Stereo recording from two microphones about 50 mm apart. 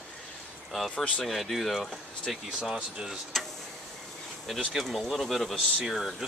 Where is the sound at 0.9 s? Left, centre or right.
Left.